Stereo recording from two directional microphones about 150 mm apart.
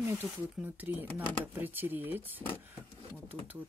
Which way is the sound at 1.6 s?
15° right (ahead or behind).